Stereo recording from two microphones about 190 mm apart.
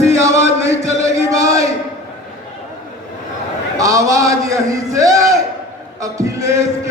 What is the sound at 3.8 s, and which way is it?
A man's voice, 15° right (ahead or behind).